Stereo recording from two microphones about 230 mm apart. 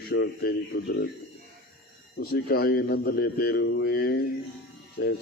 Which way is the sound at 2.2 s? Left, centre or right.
Left.